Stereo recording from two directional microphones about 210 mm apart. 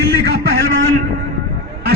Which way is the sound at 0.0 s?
50° right (ahead or behind).